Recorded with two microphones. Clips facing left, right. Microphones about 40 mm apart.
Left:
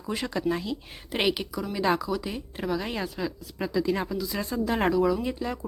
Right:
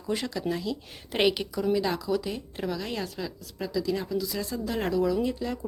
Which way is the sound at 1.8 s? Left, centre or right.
Centre.